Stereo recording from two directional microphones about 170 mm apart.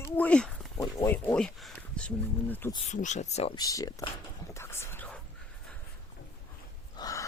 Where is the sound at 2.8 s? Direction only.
45° left (ahead or behind).